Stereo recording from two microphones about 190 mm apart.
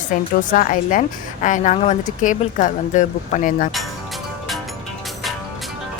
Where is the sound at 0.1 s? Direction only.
45° left (ahead or behind).